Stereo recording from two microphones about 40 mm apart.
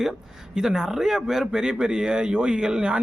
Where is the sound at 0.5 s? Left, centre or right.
Centre.